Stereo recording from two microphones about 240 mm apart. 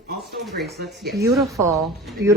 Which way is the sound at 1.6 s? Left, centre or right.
Centre.